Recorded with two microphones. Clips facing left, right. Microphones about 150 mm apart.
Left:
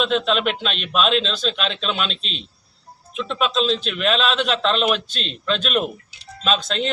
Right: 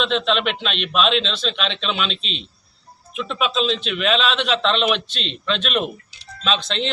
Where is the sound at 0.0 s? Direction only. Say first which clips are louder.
Left 1 dB; 5° left (ahead or behind).